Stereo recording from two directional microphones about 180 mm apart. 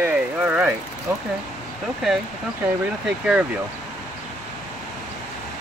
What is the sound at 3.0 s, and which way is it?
Speech, 5° right (ahead or behind).